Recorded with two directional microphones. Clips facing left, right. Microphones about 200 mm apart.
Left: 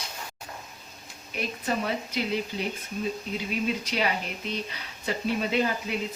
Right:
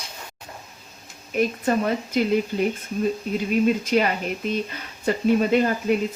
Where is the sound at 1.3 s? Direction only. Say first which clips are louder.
Right 9 dB; 50° right (ahead or behind).